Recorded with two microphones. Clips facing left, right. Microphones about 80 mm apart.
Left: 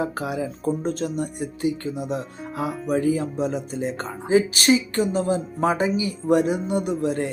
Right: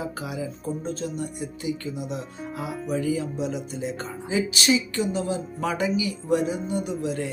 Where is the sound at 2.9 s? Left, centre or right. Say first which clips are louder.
Left 4 dB; left.